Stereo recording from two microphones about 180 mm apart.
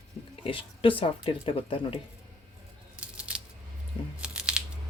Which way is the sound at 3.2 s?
5° right (ahead or behind).